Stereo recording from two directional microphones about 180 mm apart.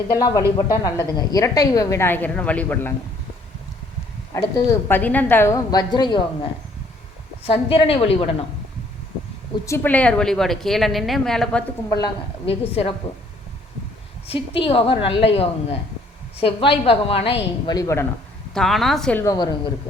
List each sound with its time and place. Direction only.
0.1 s a woman's voice: 20° left (ahead or behind)
4.4 s a woman's voice: 20° left (ahead or behind); by 8.3 s 35° left (ahead or behind)
9.6 s a woman's voice: 10° left (ahead or behind)
11.9 s a woman's voice: 20° left (ahead or behind)
12.5 s a woman's voice: 35° left (ahead or behind)
14.3 s a woman's voice: 30° left (ahead or behind)
17.7 s a woman's voice: 20° left (ahead or behind)
18.5 s a woman's voice: centre (ahead or behind)
19.2 s a woman's voice: 20° left (ahead or behind)